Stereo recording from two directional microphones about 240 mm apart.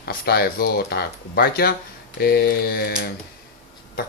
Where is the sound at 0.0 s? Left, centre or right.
Left.